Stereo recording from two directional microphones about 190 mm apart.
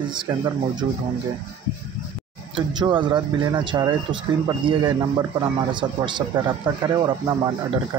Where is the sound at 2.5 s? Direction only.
25° right (ahead or behind).